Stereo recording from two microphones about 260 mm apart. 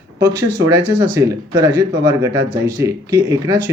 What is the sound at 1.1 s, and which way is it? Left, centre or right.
Speech, centre.